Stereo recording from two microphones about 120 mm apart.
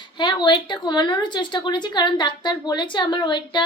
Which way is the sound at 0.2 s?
40° left (ahead or behind).